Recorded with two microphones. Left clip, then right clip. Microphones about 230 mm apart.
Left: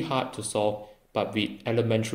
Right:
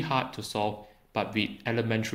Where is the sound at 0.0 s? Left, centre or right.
Right.